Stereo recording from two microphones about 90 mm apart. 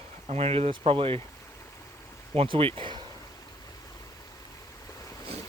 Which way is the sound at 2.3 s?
90° right.